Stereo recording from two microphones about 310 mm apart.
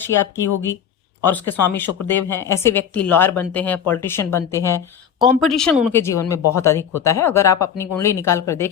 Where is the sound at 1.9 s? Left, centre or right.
Left.